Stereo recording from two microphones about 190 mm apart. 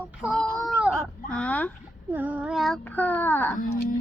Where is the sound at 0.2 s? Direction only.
Centre (ahead or behind).